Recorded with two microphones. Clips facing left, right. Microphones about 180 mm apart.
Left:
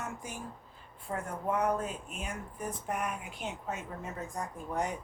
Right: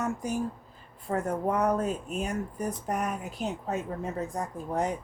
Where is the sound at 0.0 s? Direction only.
40° right (ahead or behind).